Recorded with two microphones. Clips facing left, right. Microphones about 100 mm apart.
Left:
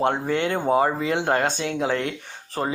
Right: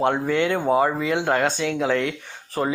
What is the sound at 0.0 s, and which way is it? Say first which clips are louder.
Speech: right 2 dB; 30° left (ahead or behind).